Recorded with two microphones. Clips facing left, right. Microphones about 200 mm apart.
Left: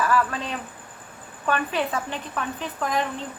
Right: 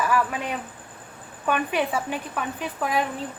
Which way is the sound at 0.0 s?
10° right (ahead or behind).